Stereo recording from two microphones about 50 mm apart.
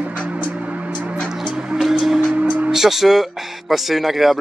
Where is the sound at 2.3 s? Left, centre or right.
Right.